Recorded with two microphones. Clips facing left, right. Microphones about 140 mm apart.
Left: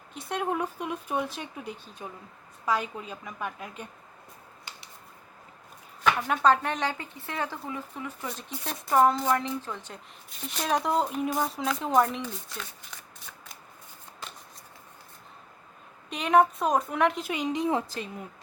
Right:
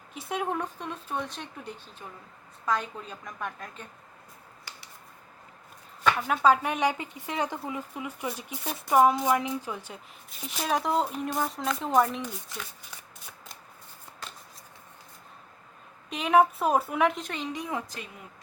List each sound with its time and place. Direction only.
0.1 s speech: centre (ahead or behind)
6.1 s speech: 5° right (ahead or behind)
16.0 s speech: centre (ahead or behind)
17.3 s a woman's voice: 20° left (ahead or behind)